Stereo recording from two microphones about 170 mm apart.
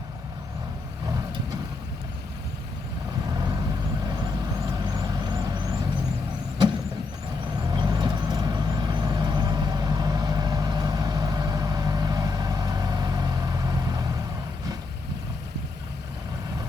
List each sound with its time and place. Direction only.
4.1 s vehicle: 20° right (ahead or behind)
7.4 s vehicle: 25° right (ahead or behind)